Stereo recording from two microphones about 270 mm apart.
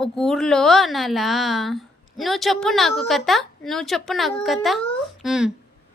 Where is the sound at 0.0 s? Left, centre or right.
Centre.